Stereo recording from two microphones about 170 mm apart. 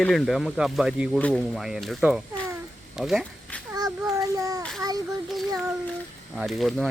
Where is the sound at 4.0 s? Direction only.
15° right (ahead or behind).